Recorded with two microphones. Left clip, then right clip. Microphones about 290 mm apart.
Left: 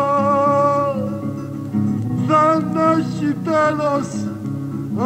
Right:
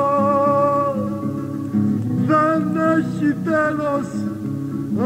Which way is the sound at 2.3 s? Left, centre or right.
Centre.